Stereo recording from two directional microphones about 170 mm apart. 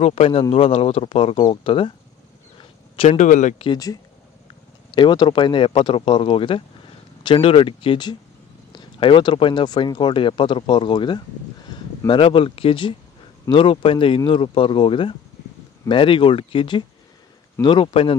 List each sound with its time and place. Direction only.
0.0 s speech: 35° left (ahead or behind)
3.0 s speech: 40° left (ahead or behind)
3.6 s speech: 25° left (ahead or behind)